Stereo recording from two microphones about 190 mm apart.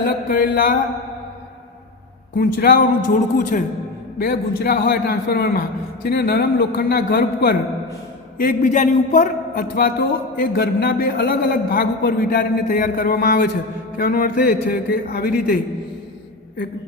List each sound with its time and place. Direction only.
0.3 s a man's voice: 50° left (ahead or behind)
2.3 s a man's voice: 50° left (ahead or behind)
4.2 s a man's voice: 55° left (ahead or behind)